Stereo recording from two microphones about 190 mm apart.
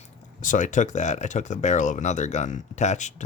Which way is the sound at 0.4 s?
40° left (ahead or behind).